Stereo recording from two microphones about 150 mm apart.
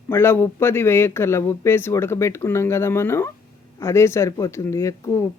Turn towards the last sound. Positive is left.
turn(degrees=20)  # may be behind; listen again after turning